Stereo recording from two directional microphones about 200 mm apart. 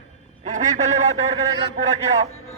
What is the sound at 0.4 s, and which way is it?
Speech, 40° right (ahead or behind).